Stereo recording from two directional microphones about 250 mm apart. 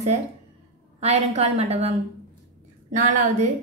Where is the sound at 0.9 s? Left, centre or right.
Right.